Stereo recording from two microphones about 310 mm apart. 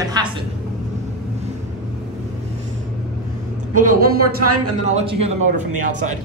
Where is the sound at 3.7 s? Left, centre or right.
Right.